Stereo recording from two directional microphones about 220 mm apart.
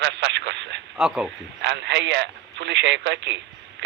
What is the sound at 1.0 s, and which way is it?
Speech, 5° right (ahead or behind).